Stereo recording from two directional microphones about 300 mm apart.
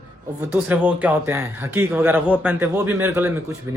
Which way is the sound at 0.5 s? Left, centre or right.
Centre.